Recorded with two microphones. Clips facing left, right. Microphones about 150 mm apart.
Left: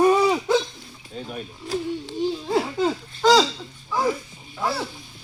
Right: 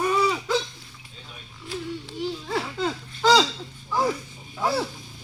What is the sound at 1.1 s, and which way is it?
Speech, 55° left (ahead or behind).